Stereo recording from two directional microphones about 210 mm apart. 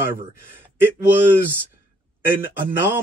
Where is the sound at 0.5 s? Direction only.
10° right (ahead or behind).